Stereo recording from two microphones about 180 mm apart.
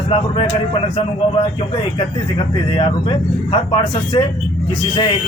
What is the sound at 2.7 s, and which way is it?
A man's voice, 30° left (ahead or behind).